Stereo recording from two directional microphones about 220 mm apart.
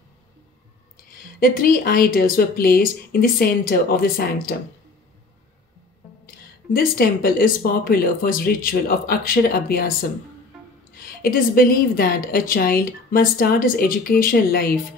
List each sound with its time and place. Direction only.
1.4 s a woman's voice: 40° left (ahead or behind)
6.2 s a woman's voice: 45° left (ahead or behind)
11.0 s a woman's voice: 40° left (ahead or behind)